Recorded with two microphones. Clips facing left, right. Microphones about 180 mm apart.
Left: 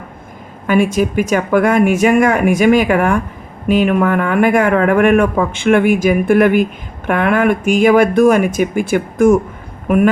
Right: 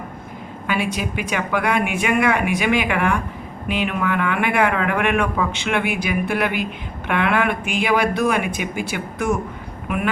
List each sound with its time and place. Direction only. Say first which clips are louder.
0.7 s speech: left 10 dB; 45° left (ahead or behind)